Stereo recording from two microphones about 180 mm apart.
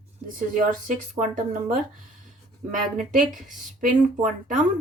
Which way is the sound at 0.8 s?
45° right (ahead or behind).